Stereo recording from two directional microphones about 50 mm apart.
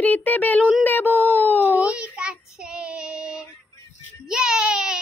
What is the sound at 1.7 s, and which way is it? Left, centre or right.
Child singing, right.